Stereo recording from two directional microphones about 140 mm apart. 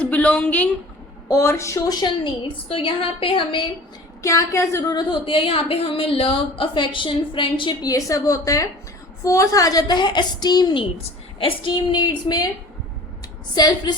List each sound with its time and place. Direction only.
0.0 s speech: 10° left (ahead or behind)
1.3 s a woman's voice: 20° left (ahead or behind); by 3.7 s 35° left (ahead or behind)
4.2 s a woman's voice: 20° left (ahead or behind)
5.2 s a woman's voice: 40° left (ahead or behind)
10.9 s a woman's voice: 40° left (ahead or behind)
13.5 s a woman's voice: 30° left (ahead or behind)